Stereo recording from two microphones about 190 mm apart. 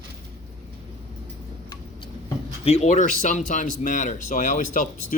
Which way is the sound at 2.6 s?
35° left (ahead or behind).